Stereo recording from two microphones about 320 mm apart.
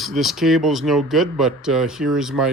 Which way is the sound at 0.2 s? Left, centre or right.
Centre.